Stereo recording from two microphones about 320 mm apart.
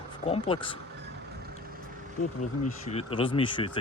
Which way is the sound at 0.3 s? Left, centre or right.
Centre.